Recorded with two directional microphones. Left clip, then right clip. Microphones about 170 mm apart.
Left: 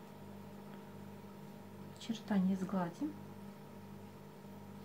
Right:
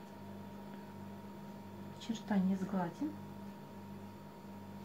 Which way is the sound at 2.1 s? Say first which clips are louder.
Right 1 dB; 20° left (ahead or behind).